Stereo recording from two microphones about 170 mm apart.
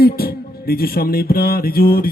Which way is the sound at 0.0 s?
65° left (ahead or behind).